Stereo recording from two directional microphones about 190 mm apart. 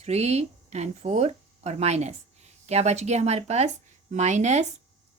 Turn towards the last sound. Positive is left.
turn(degrees=-35)  # may be behind; listen again after turning